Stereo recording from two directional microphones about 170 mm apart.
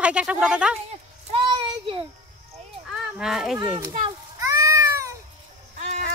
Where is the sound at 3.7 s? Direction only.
25° right (ahead or behind).